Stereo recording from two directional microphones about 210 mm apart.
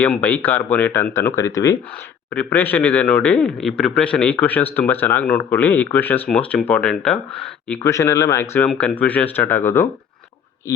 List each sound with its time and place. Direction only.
0.0 s speech: 5° left (ahead or behind)